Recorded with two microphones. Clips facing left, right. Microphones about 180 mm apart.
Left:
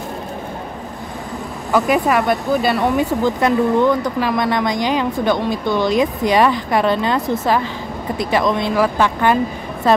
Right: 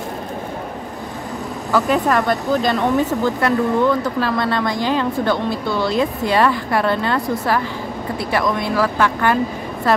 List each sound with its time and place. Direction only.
1.7 s speech: 10° left (ahead or behind)